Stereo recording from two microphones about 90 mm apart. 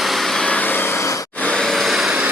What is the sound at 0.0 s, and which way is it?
Vehicle, centre (ahead or behind).